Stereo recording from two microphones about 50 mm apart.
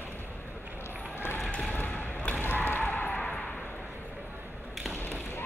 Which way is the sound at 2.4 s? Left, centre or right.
Left.